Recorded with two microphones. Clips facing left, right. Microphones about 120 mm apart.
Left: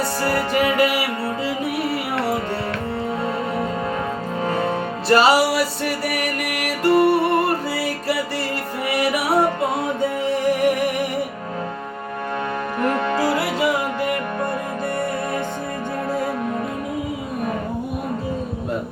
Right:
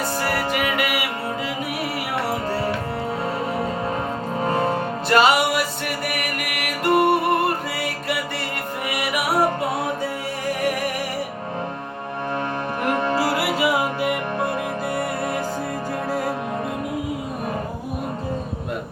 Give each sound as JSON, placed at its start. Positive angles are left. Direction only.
{"t": 0.3, "sound": "music", "side_deg": 30}
{"t": 4.4, "sound": "music", "side_deg": -30}
{"t": 5.0, "sound": "music", "side_deg": 30}
{"t": 13.3, "sound": "music", "side_deg": -10}